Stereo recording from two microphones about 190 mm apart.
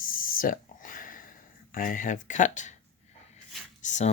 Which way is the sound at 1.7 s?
45° left (ahead or behind).